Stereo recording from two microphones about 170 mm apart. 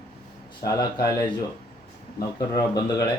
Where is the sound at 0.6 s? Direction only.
20° left (ahead or behind).